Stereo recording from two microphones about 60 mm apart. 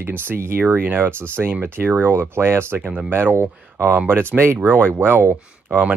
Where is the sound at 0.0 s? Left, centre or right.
Right.